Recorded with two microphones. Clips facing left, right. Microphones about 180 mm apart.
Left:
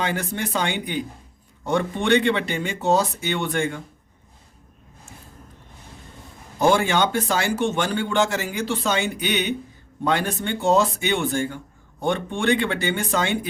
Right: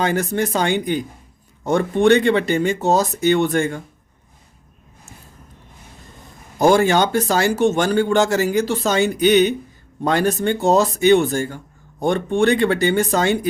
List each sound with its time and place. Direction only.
0.0 s speech: 40° right (ahead or behind)
6.6 s speech: 40° right (ahead or behind)